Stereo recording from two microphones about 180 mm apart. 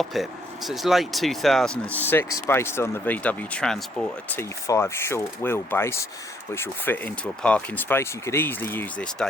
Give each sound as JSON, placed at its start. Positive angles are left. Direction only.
{"t": 0.0, "sound": "speech", "side_deg": 0}
{"t": 4.6, "sound": "speech", "side_deg": 15}